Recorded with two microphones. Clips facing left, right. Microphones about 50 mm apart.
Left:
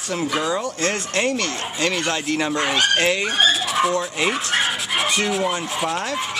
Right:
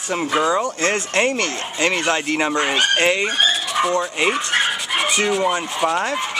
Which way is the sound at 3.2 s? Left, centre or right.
Centre.